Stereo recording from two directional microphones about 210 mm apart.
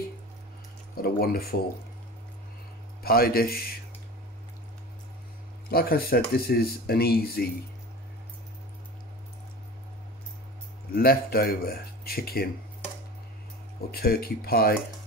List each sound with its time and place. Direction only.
0.9 s speech: 45° left (ahead or behind)
3.0 s speech: 45° left (ahead or behind)
5.7 s speech: 45° left (ahead or behind)
11.0 s speech: 45° left (ahead or behind)
13.9 s speech: 45° left (ahead or behind)